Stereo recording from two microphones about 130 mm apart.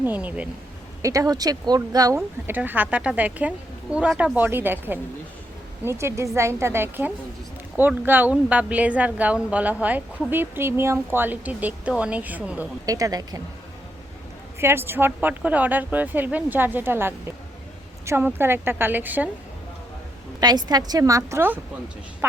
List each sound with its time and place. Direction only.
0.0 s a woman's voice: 15° right (ahead or behind)
1.0 s a woman's voice: 25° right (ahead or behind)
2.5 s a woman's voice: 15° right (ahead or behind)
12.8 s a woman's voice: 25° right (ahead or behind)
14.6 s a woman's voice: 15° right (ahead or behind)
20.4 s a woman's voice: 30° right (ahead or behind); by 22.4 s 15° right (ahead or behind)